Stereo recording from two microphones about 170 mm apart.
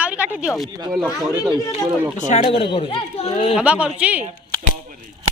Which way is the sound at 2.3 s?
40° left (ahead or behind).